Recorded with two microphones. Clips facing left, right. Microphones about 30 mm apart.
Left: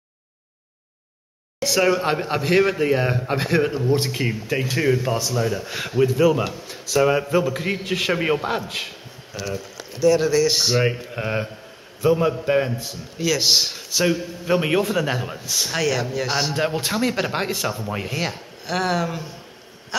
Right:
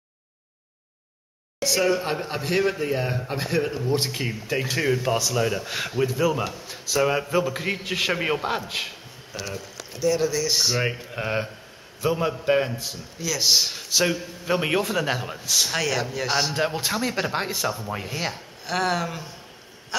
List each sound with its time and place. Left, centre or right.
1.6 s a man's voice: left
3.6 s speech: centre
4.1 s speech: centre
5.3 s speech: centre
5.6 s speech: centre
10.1 s speech: centre
10.8 s speech: centre
13.2 s speech: left
13.7 s speech: centre
19.9 s a sound: centre